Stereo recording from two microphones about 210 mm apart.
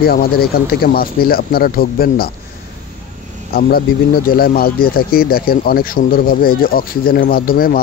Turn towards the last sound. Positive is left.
turn(degrees=45)  # may be behind; listen again after turning